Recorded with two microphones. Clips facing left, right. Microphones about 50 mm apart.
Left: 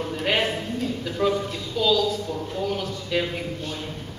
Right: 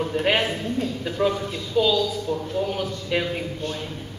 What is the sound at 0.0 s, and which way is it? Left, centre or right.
Speech, centre.